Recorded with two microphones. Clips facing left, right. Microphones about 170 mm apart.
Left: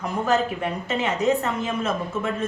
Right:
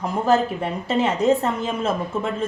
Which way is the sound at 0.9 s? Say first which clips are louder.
Right 4 dB; 30° right (ahead or behind).